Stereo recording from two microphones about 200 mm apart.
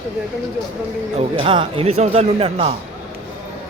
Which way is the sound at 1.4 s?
25° right (ahead or behind).